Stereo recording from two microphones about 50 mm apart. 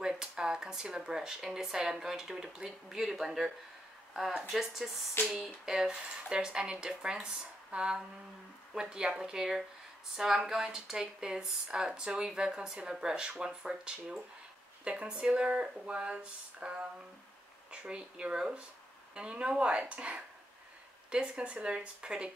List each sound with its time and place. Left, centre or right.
0.0 s speech: centre